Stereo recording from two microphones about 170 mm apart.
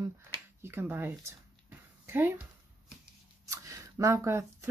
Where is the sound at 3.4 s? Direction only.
20° right (ahead or behind).